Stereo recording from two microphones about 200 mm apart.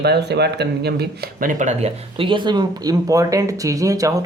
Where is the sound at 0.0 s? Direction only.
55° right (ahead or behind).